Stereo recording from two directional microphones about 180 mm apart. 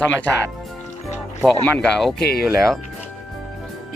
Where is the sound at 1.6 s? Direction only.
5° left (ahead or behind).